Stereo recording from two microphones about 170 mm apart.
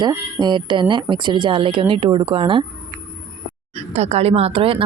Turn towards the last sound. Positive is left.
turn(degrees=-30)  # may be behind; listen again after turning